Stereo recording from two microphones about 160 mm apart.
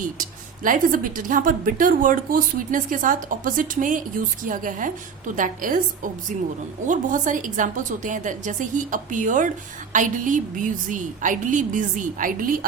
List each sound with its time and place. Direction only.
0.2 s a woman's voice: 60° right (ahead or behind)